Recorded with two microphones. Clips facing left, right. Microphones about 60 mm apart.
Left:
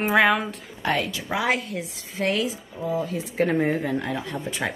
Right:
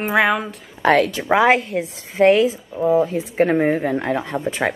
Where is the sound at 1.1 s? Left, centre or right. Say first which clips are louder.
Right 10 dB; right.